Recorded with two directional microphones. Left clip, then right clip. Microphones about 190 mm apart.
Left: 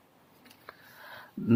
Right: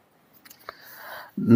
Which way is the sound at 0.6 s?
35° right (ahead or behind).